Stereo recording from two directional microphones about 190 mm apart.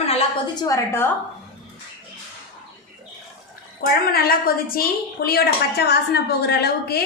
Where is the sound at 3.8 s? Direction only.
50° left (ahead or behind).